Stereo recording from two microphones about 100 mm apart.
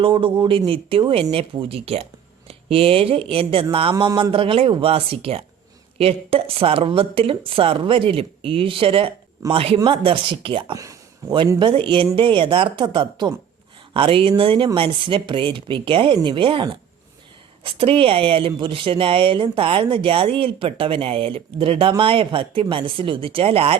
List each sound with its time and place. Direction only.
0.0 s speech: 60° right (ahead or behind)
10.8 s a sound: 35° right (ahead or behind)
11.6 s speech: 60° right (ahead or behind); by 23.7 s 75° right (ahead or behind)